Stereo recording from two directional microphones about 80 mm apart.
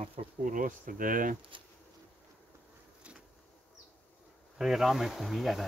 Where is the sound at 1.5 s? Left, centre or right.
Right.